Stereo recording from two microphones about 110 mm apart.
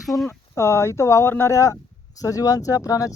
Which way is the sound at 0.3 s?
25° left (ahead or behind).